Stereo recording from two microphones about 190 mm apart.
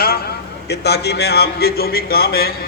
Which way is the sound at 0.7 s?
60° left (ahead or behind).